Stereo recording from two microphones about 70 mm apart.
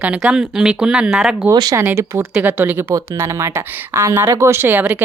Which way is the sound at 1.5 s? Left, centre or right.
Right.